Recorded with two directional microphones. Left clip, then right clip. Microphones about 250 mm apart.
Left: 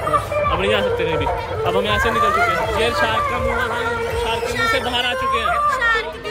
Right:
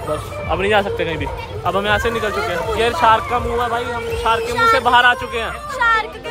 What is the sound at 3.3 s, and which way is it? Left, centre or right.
A man's voice, centre.